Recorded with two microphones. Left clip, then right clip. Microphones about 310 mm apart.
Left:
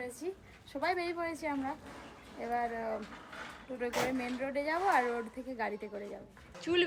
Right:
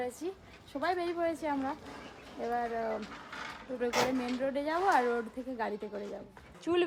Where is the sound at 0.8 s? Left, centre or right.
Centre.